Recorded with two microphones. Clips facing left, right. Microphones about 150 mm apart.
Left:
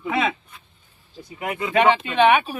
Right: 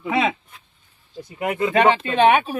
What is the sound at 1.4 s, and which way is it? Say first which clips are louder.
Speech: right 2 dB; 30° right (ahead or behind).